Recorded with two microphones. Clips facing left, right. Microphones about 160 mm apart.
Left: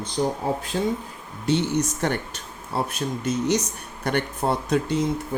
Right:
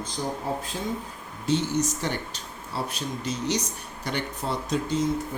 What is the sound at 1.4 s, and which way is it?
Speech, 65° left (ahead or behind).